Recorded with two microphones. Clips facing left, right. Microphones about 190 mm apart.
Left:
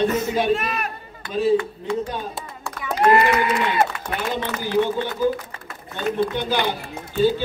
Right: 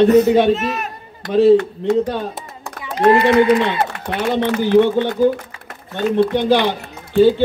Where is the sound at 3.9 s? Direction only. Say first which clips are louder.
Right 6 dB; 65° right (ahead or behind).